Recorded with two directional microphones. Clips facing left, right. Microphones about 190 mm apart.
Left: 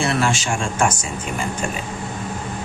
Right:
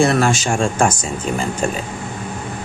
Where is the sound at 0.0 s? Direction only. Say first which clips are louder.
Right 5 dB; 45° right (ahead or behind).